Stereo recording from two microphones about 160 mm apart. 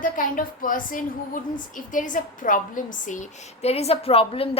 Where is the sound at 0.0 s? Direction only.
60° left (ahead or behind).